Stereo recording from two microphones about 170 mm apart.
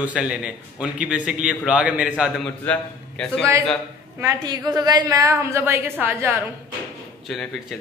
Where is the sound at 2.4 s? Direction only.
5° left (ahead or behind).